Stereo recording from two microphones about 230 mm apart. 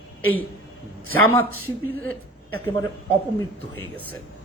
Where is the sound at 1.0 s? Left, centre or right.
Right.